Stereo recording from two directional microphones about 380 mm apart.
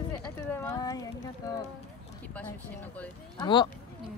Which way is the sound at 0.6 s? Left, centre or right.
Centre.